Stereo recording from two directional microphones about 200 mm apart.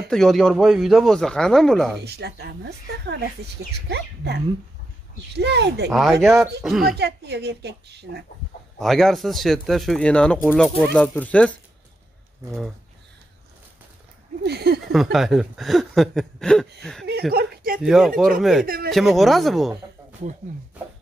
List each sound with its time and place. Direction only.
0.1 s speech: centre (ahead or behind)
2.0 s speech: 55° right (ahead or behind)
5.9 s speech: centre (ahead or behind)
7.0 s speech: 55° right (ahead or behind)
8.7 s speech: centre (ahead or behind)
14.4 s speech: 55° right (ahead or behind)
15.1 s speech: centre (ahead or behind)
17.3 s speech: 50° right (ahead or behind)
17.8 s speech: centre (ahead or behind)